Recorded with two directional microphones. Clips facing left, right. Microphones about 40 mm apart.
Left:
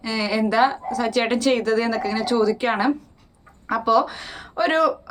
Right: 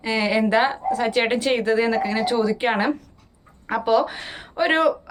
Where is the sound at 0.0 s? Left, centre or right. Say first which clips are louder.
Right 2 dB; right.